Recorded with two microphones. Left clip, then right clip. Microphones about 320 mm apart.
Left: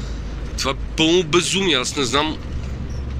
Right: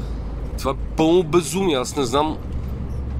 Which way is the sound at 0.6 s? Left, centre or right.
Centre.